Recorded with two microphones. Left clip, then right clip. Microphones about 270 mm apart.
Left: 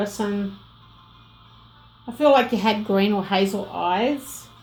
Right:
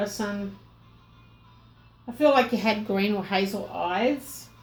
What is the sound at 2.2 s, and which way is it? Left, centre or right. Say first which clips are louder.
A woman's voice: left 4 dB; left.